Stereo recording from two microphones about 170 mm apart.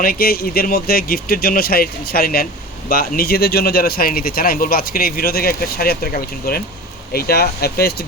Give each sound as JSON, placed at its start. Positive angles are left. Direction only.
{"t": 0.0, "sound": "speech", "side_deg": 60}